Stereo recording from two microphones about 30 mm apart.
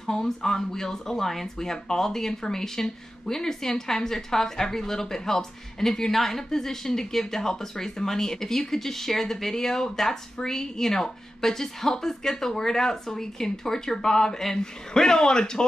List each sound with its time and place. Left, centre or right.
0.0 s speech: centre